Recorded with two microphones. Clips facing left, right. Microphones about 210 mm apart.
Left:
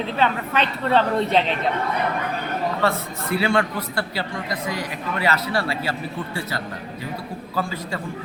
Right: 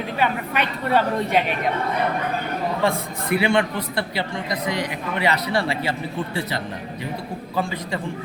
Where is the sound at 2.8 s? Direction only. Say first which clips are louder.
Right 1 dB; 15° right (ahead or behind).